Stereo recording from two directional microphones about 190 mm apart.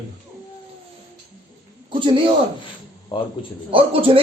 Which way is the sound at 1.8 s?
25° right (ahead or behind).